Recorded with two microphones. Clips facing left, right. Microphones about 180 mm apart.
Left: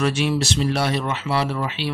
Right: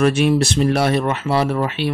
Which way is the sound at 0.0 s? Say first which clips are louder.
Right 6 dB; 55° right (ahead or behind).